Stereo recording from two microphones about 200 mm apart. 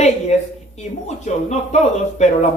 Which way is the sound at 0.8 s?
35° left (ahead or behind).